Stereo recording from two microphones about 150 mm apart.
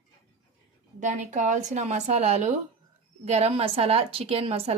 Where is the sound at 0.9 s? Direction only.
55° right (ahead or behind).